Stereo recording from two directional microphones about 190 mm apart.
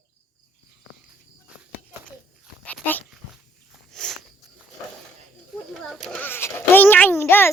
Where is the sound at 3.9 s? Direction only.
Centre (ahead or behind).